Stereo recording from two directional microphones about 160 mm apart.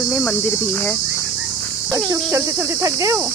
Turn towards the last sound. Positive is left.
turn(degrees=-20)  # may be behind; listen again after turning